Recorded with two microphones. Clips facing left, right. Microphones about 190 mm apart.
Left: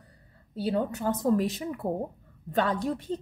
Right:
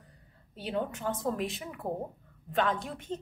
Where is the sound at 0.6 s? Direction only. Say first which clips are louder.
Left 5 dB; 35° left (ahead or behind).